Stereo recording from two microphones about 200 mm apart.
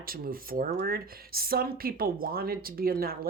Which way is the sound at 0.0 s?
45° right (ahead or behind).